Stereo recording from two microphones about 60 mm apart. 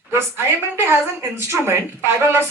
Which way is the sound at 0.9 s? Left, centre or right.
Right.